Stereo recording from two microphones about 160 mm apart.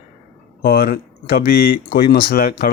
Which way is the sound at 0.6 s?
75° left (ahead or behind).